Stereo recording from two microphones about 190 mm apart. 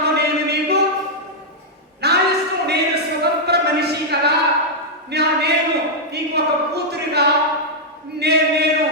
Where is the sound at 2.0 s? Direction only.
60° right (ahead or behind).